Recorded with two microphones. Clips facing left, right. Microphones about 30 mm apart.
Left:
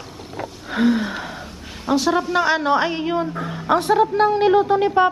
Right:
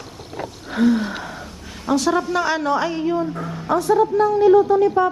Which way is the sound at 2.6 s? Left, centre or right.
Left.